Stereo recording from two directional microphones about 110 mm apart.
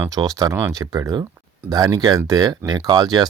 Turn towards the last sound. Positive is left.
turn(degrees=-35)  # may be behind; listen again after turning